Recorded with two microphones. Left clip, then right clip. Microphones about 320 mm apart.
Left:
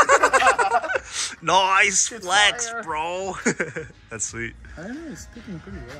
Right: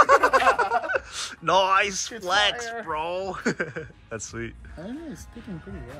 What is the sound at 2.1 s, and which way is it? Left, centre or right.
Speech, centre.